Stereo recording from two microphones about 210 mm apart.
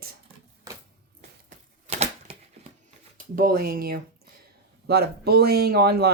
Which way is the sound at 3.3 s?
45° right (ahead or behind).